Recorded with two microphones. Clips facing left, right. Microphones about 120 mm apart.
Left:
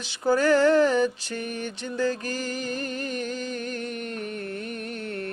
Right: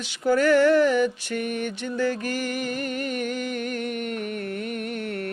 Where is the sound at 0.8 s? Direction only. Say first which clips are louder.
Right 1 dB; 35° left (ahead or behind).